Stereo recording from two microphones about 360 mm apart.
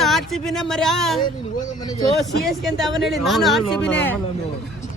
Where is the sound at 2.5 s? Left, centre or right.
Centre.